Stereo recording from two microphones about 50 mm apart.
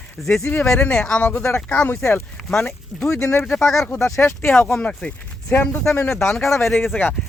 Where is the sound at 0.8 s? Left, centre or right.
Left.